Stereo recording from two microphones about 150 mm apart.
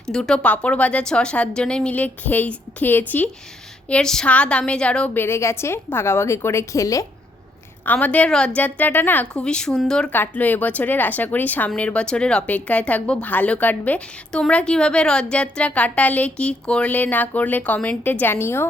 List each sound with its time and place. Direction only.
0.1 s a woman's voice: 5° left (ahead or behind); by 7.0 s 20° left (ahead or behind)
7.9 s a woman's voice: 10° left (ahead or behind)